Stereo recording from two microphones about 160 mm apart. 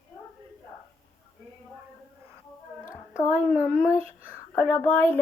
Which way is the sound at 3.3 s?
10° right (ahead or behind).